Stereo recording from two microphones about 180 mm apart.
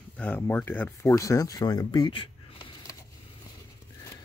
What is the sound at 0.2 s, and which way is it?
Speech, 10° left (ahead or behind).